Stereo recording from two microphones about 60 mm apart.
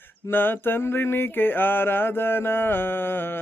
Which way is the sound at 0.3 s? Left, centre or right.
Left.